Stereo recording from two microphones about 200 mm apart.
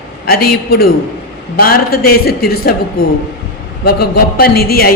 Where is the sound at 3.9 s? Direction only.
50° left (ahead or behind).